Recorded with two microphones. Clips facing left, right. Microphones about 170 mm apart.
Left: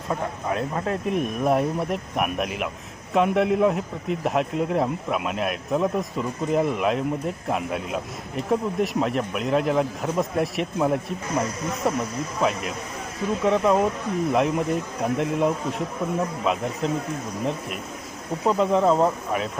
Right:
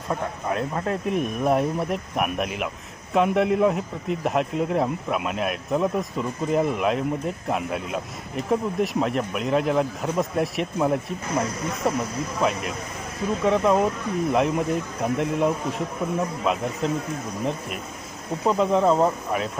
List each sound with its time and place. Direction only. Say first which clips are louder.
0.1 s a man's voice: even; centre (ahead or behind)
18.4 s a man's voice: even; centre (ahead or behind)